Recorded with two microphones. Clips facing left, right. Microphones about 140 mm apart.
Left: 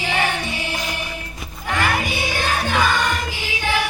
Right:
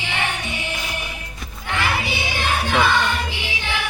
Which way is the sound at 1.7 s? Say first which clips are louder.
Left 2 dB; 45° left (ahead or behind).